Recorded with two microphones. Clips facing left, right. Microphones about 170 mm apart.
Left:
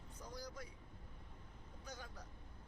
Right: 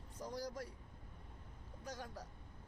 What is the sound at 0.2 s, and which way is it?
Vehicle, 90° right.